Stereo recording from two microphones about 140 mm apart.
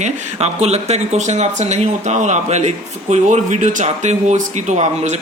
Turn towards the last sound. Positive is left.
turn(degrees=-55)  # may be behind; listen again after turning